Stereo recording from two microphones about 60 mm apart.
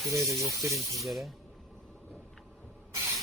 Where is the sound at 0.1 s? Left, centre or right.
Right.